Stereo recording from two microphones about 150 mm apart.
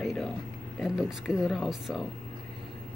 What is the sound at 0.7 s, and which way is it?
Speech, 5° right (ahead or behind).